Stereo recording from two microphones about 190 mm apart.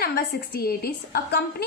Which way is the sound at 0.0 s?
55° left (ahead or behind).